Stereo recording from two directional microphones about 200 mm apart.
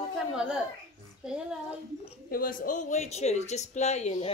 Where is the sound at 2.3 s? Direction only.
45° left (ahead or behind).